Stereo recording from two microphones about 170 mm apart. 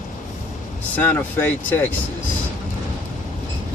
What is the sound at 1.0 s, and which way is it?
Speech, 10° left (ahead or behind).